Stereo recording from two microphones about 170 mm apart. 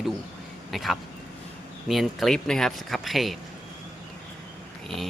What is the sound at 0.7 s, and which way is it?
Speech, centre (ahead or behind).